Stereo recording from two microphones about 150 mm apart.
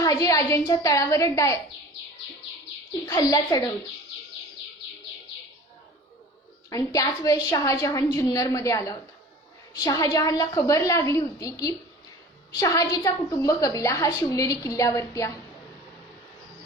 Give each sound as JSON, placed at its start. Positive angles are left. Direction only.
{"t": 0.0, "sound": "a woman's voice", "side_deg": 25}
{"t": 3.1, "sound": "a woman's voice", "side_deg": 25}
{"t": 6.7, "sound": "a woman's voice", "side_deg": 25}